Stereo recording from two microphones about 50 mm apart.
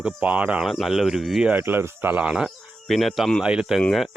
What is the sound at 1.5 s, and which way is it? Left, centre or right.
Speech, right.